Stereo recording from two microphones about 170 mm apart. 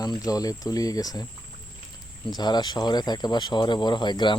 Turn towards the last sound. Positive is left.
turn(degrees=25)  # may be behind; listen again after turning